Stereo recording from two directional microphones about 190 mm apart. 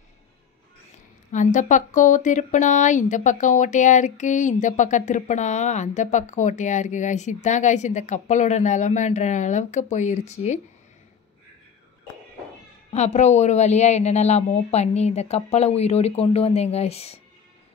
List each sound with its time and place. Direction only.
1.3 s speech: 40° left (ahead or behind)
12.9 s speech: 35° left (ahead or behind)